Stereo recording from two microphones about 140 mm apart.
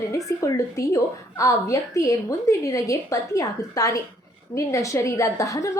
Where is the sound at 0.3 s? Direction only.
25° left (ahead or behind).